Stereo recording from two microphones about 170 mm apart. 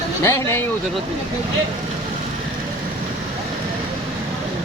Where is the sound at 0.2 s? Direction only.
15° left (ahead or behind).